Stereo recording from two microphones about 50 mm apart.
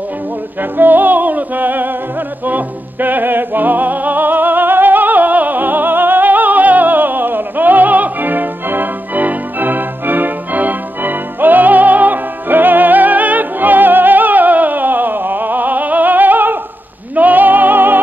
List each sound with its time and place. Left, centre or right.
0.6 s music: right